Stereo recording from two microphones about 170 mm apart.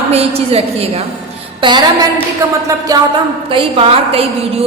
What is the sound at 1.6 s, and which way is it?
A woman's voice, 25° right (ahead or behind).